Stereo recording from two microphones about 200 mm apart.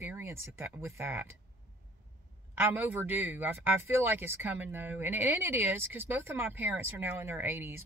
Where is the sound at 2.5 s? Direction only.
10° right (ahead or behind).